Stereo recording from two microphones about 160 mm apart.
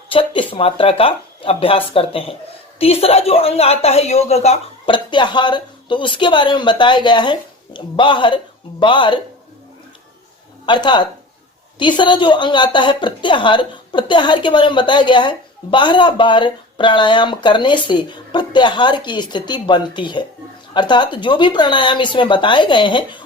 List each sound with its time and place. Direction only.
0.1 s a woman's voice: 35° left (ahead or behind)
5.1 s a woman's voice: 30° left (ahead or behind)
10.7 s a woman's voice: 30° left (ahead or behind)